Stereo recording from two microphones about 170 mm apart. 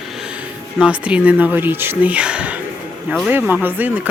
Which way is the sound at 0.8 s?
5° right (ahead or behind).